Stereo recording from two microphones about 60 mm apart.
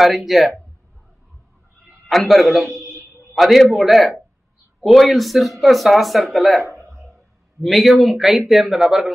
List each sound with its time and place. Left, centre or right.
0.0 s speech: centre
2.0 s speech: centre
2.8 s a sound: right
3.3 s speech: centre
6.7 s a sound: centre
7.6 s speech: centre